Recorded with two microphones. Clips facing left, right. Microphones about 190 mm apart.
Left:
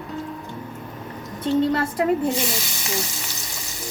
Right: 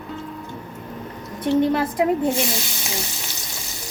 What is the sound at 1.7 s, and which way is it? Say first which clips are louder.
Speech: right 1 dB; 15° right (ahead or behind).